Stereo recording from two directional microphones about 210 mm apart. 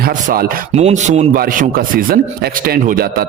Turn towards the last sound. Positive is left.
turn(degrees=-45)  # may be behind; listen again after turning